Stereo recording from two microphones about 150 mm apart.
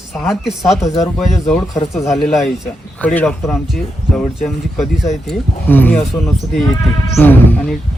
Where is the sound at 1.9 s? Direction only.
Centre (ahead or behind).